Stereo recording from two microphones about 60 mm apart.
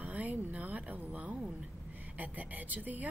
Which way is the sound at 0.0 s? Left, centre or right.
Right.